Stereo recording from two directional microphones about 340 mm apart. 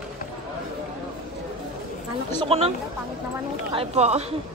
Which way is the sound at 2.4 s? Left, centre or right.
Centre.